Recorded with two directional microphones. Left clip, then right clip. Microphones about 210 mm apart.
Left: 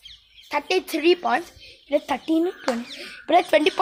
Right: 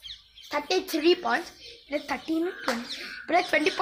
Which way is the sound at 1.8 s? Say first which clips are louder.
Left 7 dB; 25° left (ahead or behind).